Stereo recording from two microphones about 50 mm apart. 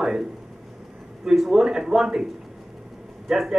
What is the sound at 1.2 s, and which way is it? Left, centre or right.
Speech, centre.